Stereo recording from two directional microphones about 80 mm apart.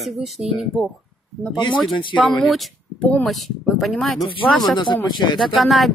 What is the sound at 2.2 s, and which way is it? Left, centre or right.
Speech, centre.